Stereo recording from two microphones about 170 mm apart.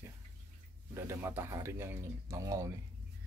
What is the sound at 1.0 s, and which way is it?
Speech, 15° right (ahead or behind).